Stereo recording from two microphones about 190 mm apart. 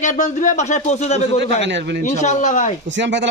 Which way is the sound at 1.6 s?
70° right (ahead or behind).